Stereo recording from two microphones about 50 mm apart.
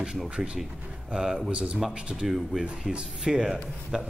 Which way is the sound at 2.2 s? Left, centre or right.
Centre.